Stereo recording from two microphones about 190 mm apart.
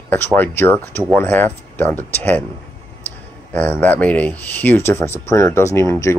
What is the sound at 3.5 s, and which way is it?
Speech, 10° left (ahead or behind).